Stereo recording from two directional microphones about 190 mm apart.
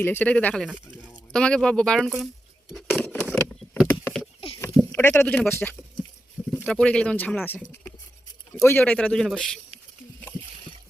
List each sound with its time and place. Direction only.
0.0 s speech: 10° left (ahead or behind)
2.7 s a sound: 5° left (ahead or behind)
4.9 s speech: 10° left (ahead or behind)